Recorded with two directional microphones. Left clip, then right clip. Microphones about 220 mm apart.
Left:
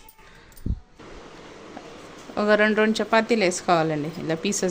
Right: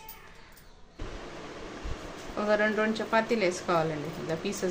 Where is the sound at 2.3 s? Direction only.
45° left (ahead or behind).